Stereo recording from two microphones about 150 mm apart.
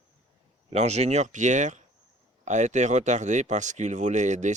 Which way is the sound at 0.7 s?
45° right (ahead or behind).